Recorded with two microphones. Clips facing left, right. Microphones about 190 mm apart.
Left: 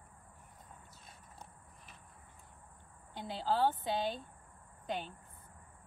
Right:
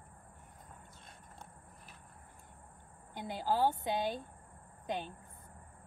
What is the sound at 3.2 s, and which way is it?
A woman's voice, 15° right (ahead or behind).